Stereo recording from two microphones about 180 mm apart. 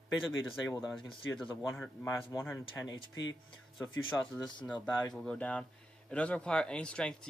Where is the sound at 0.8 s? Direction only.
Centre (ahead or behind).